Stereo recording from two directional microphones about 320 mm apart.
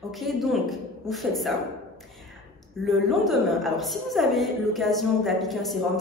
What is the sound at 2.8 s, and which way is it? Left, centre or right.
A woman's voice, centre.